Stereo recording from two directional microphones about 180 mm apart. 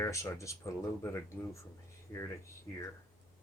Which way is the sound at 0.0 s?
15° left (ahead or behind).